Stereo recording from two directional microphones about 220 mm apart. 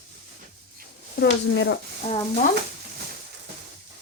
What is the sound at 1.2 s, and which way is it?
Speech, 55° left (ahead or behind).